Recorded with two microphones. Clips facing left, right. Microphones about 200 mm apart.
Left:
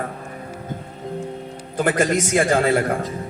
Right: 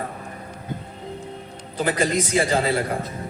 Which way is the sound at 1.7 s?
50° left (ahead or behind).